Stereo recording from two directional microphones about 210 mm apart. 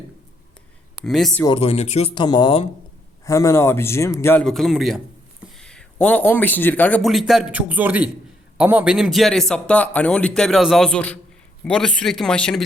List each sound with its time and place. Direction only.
1.0 s a man's voice: centre (ahead or behind)
1.5 s a man's voice: 30° left (ahead or behind); by 12.6 s 5° left (ahead or behind)